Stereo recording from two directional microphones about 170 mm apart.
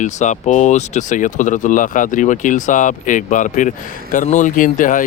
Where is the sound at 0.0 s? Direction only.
45° left (ahead or behind).